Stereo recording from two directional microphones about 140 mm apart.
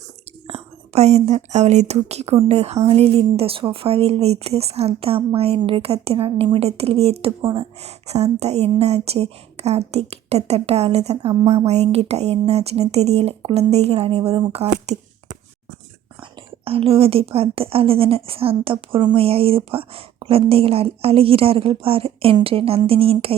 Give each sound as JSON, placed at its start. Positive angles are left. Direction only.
{"t": 0.4, "sound": "a woman's voice", "side_deg": -50}
{"t": 16.6, "sound": "a woman's voice", "side_deg": -45}